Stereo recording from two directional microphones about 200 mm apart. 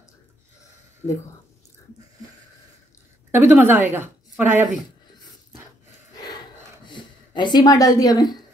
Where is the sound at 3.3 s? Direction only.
10° right (ahead or behind).